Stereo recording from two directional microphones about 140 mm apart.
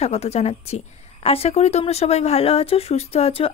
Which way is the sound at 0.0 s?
50° left (ahead or behind).